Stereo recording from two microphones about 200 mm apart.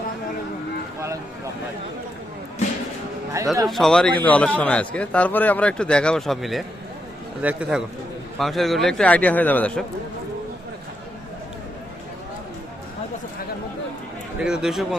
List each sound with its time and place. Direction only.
3.3 s a man's voice: 15° right (ahead or behind)
3.7 s a man's voice: centre (ahead or behind)
14.4 s a man's voice: 5° right (ahead or behind)